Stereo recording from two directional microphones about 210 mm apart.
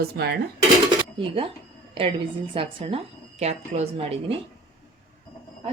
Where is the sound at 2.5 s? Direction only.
25° right (ahead or behind).